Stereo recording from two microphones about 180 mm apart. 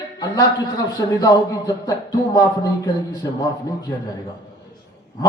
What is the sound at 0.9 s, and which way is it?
Speech, 20° left (ahead or behind).